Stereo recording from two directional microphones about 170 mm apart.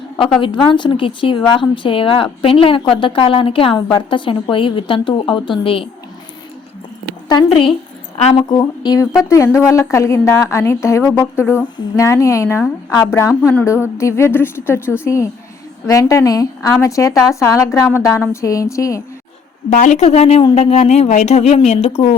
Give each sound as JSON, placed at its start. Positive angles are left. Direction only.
{"t": 0.2, "sound": "a woman's voice", "side_deg": 30}
{"t": 7.3, "sound": "a woman's voice", "side_deg": 25}
{"t": 19.7, "sound": "speech", "side_deg": 45}